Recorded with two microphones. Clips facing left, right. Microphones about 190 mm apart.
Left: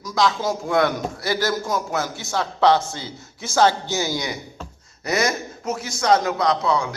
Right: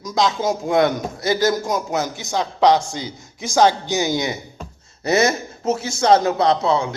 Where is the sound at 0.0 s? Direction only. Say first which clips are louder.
Right 2 dB; 20° right (ahead or behind).